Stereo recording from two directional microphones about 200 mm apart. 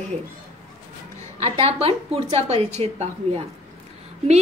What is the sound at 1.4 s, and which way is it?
A woman's voice, 30° right (ahead or behind).